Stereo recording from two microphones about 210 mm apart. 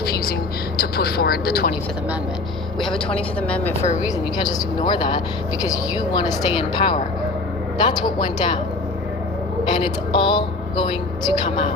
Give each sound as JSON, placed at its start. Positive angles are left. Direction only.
{"t": 0.8, "sound": "speech", "side_deg": 45}
{"t": 3.4, "sound": "a woman's voice", "side_deg": 5}
{"t": 3.8, "sound": "a woman's voice", "side_deg": 35}
{"t": 4.4, "sound": "speech", "side_deg": 20}
{"t": 9.8, "sound": "speech", "side_deg": 25}